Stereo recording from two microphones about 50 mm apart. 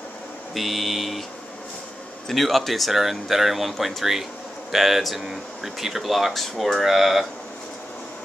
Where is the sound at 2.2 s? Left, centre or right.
Centre.